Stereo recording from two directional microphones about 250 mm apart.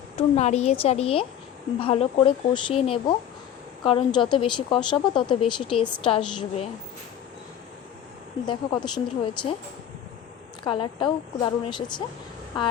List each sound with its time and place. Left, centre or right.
0.2 s a woman's voice: left
8.4 s a woman's voice: centre
10.6 s a woman's voice: centre